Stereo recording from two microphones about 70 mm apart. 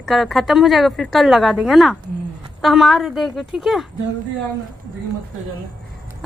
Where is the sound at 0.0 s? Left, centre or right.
Centre.